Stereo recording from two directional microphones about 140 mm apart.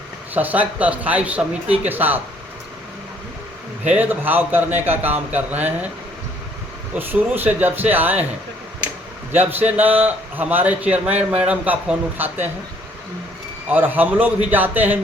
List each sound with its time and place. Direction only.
0.3 s a man's voice: 10° right (ahead or behind)
3.8 s a man's voice: 10° right (ahead or behind)
7.0 s a man's voice: 15° right (ahead or behind)
9.3 s a man's voice: 15° right (ahead or behind)
13.7 s a man's voice: 15° right (ahead or behind)